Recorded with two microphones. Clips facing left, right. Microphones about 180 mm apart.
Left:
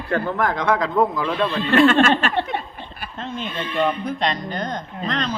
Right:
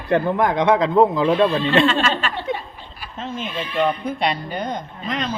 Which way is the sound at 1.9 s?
50° left (ahead or behind).